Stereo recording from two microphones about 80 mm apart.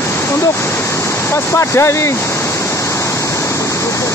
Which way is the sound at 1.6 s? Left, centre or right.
Left.